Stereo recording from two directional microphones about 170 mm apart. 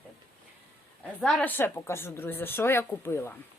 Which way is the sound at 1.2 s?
5° left (ahead or behind).